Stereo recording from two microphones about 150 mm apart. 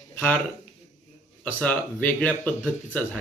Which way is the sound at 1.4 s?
10° left (ahead or behind).